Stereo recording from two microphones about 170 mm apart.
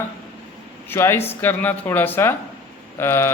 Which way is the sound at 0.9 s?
15° left (ahead or behind).